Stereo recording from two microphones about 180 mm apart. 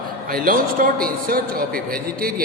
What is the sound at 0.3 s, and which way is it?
A man's voice, 55° right (ahead or behind).